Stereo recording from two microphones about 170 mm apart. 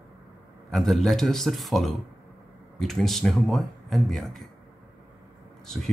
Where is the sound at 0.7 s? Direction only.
Centre (ahead or behind).